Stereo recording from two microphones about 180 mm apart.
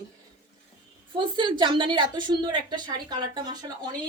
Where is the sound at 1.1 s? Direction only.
25° right (ahead or behind).